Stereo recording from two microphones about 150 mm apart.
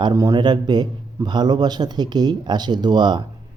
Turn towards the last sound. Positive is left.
turn(degrees=-30)  # may be behind; listen again after turning